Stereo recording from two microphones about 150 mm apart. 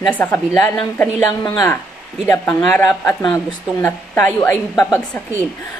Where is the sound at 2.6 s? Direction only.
5° left (ahead or behind).